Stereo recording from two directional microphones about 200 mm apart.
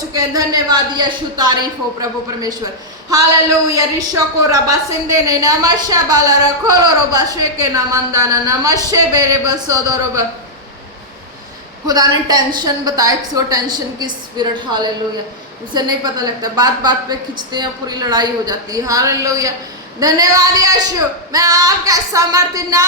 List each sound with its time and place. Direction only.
0.1 s a woman's voice: 20° right (ahead or behind)
3.7 s speech: 15° right (ahead or behind)
11.9 s a woman's voice: 20° right (ahead or behind)